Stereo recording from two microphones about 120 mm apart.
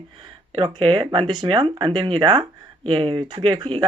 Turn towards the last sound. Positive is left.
turn(degrees=-45)  # may be behind; listen again after turning